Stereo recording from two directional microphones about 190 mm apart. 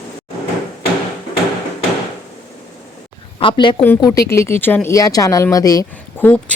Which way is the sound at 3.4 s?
25° left (ahead or behind).